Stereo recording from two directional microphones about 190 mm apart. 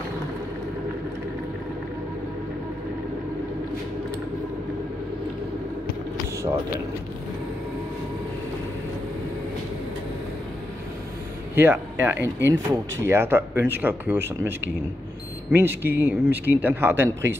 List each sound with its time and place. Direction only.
11.5 s speech: 10° right (ahead or behind)
12.4 s speech: 70° right (ahead or behind)
13.0 s speech: 15° right (ahead or behind)